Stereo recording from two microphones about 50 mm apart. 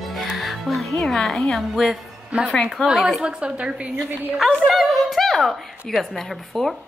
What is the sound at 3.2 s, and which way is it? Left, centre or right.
Speech, right.